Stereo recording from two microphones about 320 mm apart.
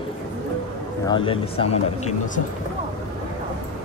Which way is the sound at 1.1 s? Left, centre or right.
Centre.